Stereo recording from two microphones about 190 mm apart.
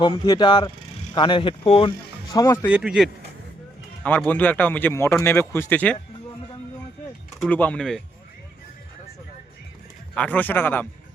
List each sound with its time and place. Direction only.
0.0 s speech: 25° left (ahead or behind)
2.3 s speech: 15° left (ahead or behind)
2.6 s speech: 5° right (ahead or behind)
4.3 s speech: 10° left (ahead or behind)
7.4 s speech: 5° left (ahead or behind)
10.2 s speech: 10° left (ahead or behind)